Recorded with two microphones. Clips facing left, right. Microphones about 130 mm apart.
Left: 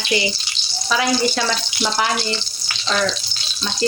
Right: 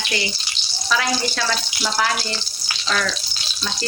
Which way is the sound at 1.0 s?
15° left (ahead or behind).